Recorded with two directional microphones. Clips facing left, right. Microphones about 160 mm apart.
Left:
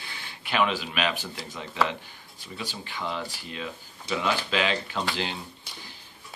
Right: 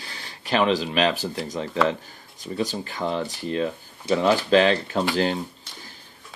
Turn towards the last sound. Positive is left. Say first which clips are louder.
# right 1 dB
turn(degrees=10)  # may be behind; listen again after turning